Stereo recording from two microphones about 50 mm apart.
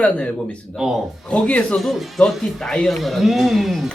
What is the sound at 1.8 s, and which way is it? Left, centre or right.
Speech, centre.